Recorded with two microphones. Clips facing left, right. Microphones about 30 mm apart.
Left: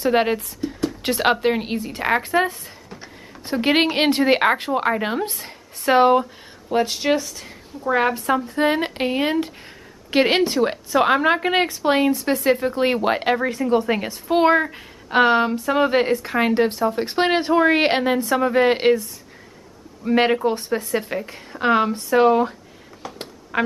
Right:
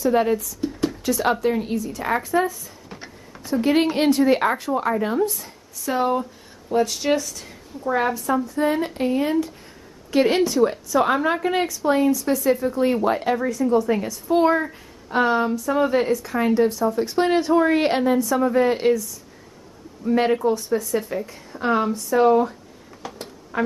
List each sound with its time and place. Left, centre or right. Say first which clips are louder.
0.0 s speech: even; left
0.6 s a sound: right 1 dB; centre
1.0 s a woman's voice: left 3 dB; left
6.7 s speech: left 1 dB; left
7.9 s a woman's voice: left 2 dB; left
11.8 s a woman's voice: left 1 dB; left
13.6 s a woman's voice: even; left
23.0 s a sound: even; centre
23.5 s music: left 2 dB; left